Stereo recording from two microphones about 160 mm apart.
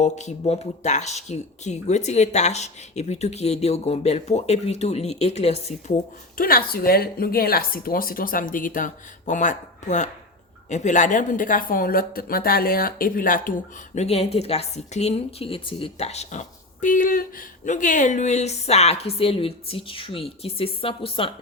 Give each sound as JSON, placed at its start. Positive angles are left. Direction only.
{"t": 0.0, "sound": "speech", "side_deg": 45}
{"t": 6.3, "sound": "speech", "side_deg": 65}
{"t": 13.9, "sound": "a woman's voice", "side_deg": 40}